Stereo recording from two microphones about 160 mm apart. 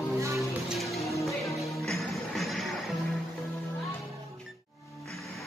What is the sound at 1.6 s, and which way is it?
Music, centre (ahead or behind).